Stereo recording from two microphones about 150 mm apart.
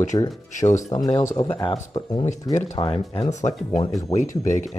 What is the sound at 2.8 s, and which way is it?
Speech, 35° left (ahead or behind).